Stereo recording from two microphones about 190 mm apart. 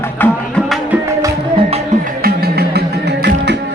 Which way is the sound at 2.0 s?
55° right (ahead or behind).